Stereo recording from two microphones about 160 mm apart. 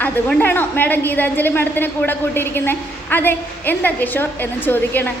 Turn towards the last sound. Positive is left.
turn(degrees=10)  # may be behind; listen again after turning